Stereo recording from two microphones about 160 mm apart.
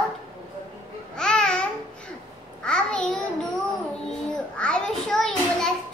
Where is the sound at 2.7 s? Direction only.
5° left (ahead or behind).